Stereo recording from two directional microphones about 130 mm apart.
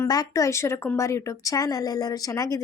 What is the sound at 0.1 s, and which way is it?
Speech, 25° left (ahead or behind).